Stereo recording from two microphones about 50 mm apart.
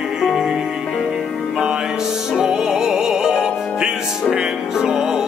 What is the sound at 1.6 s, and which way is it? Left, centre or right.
Music, centre.